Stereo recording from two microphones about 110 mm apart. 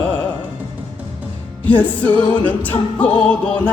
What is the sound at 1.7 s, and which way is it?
A capella, 15° left (ahead or behind).